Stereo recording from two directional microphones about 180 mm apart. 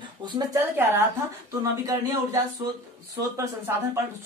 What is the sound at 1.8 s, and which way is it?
A woman's voice, 20° right (ahead or behind).